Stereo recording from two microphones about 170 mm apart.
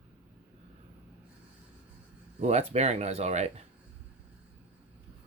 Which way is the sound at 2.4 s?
40° right (ahead or behind).